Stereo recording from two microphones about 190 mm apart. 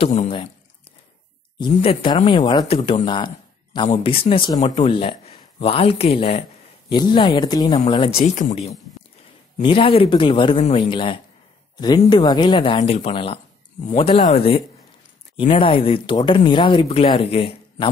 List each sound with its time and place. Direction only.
0.0 s speech: 40° left (ahead or behind)
1.6 s speech: 30° left (ahead or behind)
8.3 s speech: 40° left (ahead or behind)